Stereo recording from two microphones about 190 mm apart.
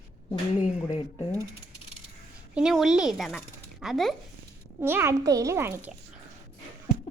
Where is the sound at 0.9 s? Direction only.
35° left (ahead or behind).